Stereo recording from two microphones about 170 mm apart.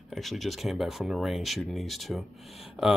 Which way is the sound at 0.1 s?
Centre (ahead or behind).